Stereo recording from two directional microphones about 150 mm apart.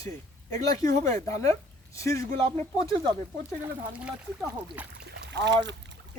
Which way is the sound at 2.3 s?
40° right (ahead or behind).